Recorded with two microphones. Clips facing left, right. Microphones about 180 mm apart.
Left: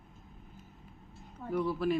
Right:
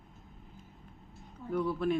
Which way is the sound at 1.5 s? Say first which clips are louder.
Even; 5° left (ahead or behind).